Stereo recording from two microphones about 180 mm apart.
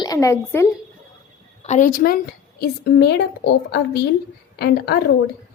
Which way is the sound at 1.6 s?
45° left (ahead or behind).